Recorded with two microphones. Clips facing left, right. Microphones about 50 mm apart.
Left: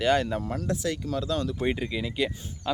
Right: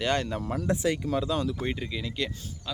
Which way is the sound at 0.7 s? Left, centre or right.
Centre.